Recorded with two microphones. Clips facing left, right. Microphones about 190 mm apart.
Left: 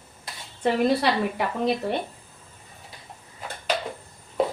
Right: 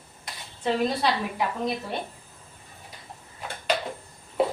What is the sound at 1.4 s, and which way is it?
Speech, 65° left (ahead or behind).